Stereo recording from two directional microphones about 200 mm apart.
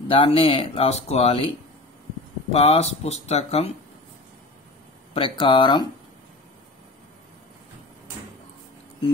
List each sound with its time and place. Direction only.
0.1 s speech: 30° left (ahead or behind)
2.5 s speech: 30° left (ahead or behind)
5.1 s speech: 25° left (ahead or behind)